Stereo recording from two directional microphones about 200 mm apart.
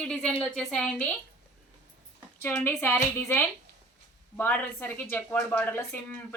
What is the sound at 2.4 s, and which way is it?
A woman's voice, 10° left (ahead or behind).